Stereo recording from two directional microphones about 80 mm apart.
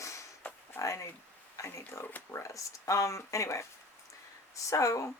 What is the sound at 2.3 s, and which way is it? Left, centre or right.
Speech, left.